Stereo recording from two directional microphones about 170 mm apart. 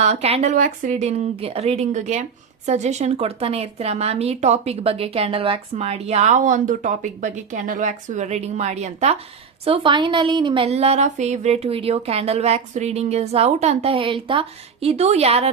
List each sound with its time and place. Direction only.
0.0 s speech: 40° right (ahead or behind)
0.5 s speech: 50° right (ahead or behind)
9.6 s speech: 30° right (ahead or behind)